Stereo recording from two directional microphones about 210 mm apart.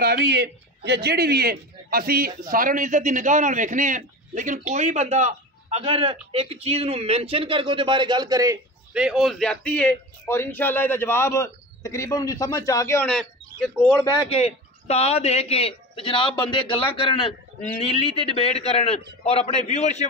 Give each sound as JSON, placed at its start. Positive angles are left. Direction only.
{"t": 0.0, "sound": "a man's voice", "side_deg": -50}
{"t": 8.9, "sound": "a man's voice", "side_deg": 0}
{"t": 14.2, "sound": "a man's voice", "side_deg": 30}